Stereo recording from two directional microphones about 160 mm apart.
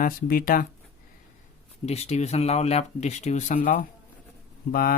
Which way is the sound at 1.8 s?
40° left (ahead or behind).